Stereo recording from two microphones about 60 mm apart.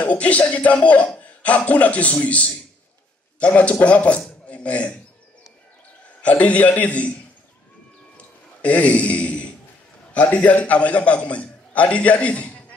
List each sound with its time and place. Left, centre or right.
0.0 s a man's voice: left
4.2 s a sound: centre
6.2 s a man's voice: left
8.6 s a man's voice: left